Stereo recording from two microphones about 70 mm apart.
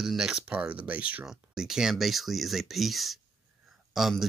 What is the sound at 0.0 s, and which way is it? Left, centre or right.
Speech, centre.